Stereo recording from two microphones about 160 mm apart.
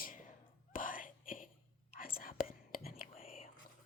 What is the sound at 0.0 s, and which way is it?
Whispering, 55° left (ahead or behind).